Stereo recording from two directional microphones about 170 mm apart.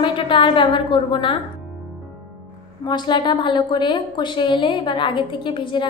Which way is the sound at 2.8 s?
25° left (ahead or behind).